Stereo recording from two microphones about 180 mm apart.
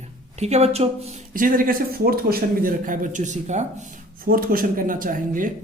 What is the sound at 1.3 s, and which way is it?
Speech, 50° right (ahead or behind).